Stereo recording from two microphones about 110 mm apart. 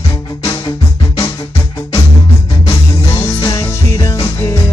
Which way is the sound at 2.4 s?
45° left (ahead or behind).